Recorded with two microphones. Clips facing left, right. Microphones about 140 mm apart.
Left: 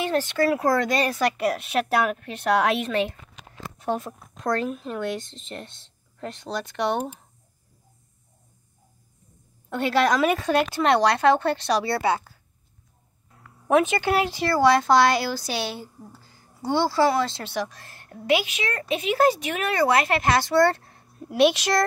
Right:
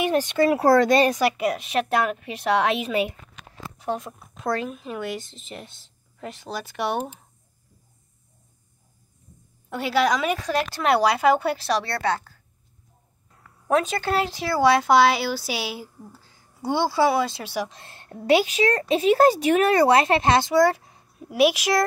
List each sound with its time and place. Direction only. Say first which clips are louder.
0.0 s speech: right 2 dB; 15° right (ahead or behind)
0.7 s speech: right 5 dB; 35° right (ahead or behind)
1.1 s speech: right 1 dB; 5° right (ahead or behind)
9.7 s speech: even; 5° right (ahead or behind)
13.7 s speech: left 2 dB; 5° left (ahead or behind)
16.6 s speech: even; 10° right (ahead or behind)
17.6 s a woman's voice: right 2 dB; 25° right (ahead or behind)
18.2 s speech: right 5 dB; 35° right (ahead or behind)
20.5 s a sound: right 1 dB; 10° right (ahead or behind)
21.3 s speech: even; 5° right (ahead or behind)